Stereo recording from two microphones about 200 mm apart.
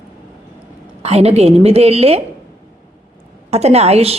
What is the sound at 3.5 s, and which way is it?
Speech, 30° right (ahead or behind).